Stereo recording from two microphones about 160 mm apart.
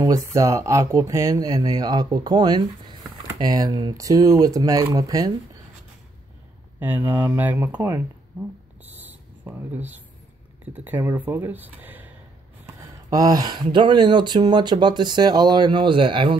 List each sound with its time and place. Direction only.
0.0 s speech: 20° right (ahead or behind)
6.8 s speech: 10° right (ahead or behind)
8.3 s speech: 5° right (ahead or behind)
8.8 s a sound: 10° right (ahead or behind)
10.6 s speech: 10° right (ahead or behind)
12.6 s speech: 20° right (ahead or behind)